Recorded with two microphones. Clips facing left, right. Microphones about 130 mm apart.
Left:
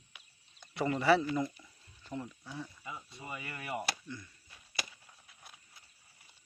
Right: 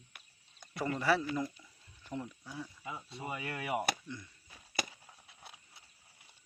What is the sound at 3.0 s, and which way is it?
Speech, 75° right (ahead or behind).